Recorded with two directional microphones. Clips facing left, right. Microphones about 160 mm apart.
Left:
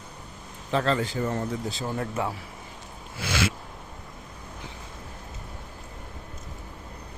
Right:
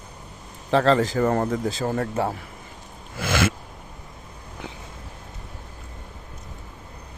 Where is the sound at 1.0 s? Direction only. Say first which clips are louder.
Right 7 dB; 85° right; by 2.1 s 50° right (ahead or behind).